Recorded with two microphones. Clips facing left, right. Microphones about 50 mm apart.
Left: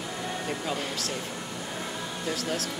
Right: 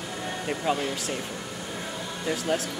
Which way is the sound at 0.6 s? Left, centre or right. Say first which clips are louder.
Right 4 dB; centre.